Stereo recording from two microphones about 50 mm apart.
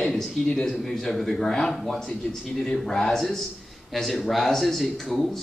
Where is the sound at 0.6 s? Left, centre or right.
Centre.